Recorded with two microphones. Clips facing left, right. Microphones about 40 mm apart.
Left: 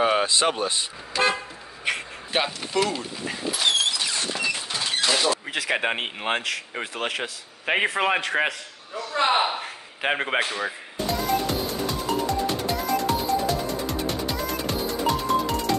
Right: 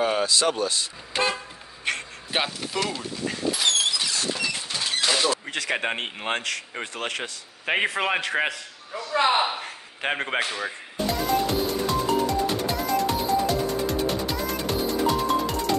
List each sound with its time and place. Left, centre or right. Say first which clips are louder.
0.0 s speech: left 2 dB; left
2.3 s vehicle: left 2 dB; centre; by 4.3 s left
4.4 s speech: left 1 dB; centre
11.1 s music: right 1 dB; centre